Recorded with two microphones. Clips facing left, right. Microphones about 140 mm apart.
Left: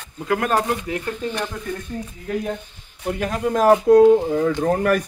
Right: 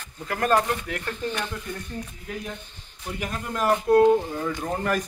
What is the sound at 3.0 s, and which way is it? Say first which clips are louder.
A man's voice: left 9 dB; 80° left.